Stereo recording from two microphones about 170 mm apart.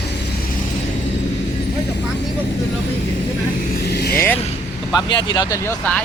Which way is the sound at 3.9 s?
70° left (ahead or behind).